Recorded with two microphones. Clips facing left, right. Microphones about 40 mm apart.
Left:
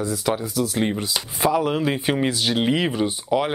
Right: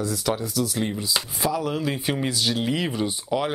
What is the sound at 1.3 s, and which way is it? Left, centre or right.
Speech, left.